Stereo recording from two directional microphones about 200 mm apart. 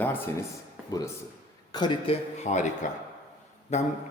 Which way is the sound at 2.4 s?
35° left (ahead or behind).